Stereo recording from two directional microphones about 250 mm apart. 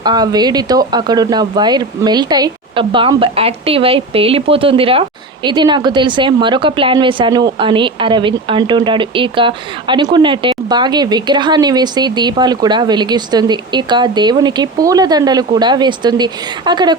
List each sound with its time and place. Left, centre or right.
0.0 s speech: centre